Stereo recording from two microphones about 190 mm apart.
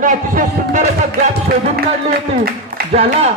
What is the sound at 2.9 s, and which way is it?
Speech, 35° right (ahead or behind).